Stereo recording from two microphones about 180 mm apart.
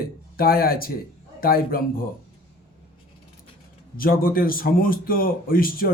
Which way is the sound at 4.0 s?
55° left (ahead or behind).